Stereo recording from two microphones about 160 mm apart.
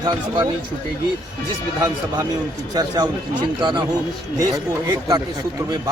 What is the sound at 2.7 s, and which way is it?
Speech, 25° right (ahead or behind).